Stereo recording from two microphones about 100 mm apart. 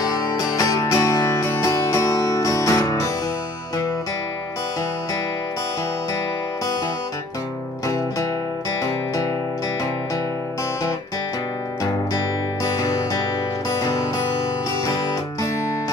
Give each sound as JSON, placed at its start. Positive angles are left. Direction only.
{"t": 0.0, "sound": "music", "side_deg": 35}
{"t": 12.6, "sound": "music", "side_deg": 40}